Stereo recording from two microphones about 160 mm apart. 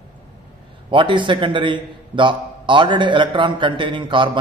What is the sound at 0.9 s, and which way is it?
A man's voice, 30° right (ahead or behind).